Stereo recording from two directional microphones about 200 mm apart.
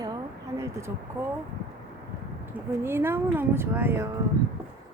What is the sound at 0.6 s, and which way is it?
Speech, 15° right (ahead or behind).